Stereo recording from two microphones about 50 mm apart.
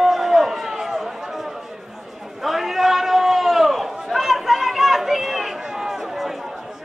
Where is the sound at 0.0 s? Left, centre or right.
Centre.